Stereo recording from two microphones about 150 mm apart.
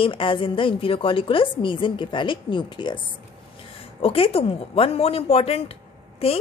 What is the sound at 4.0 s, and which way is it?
A woman's voice, 40° left (ahead or behind).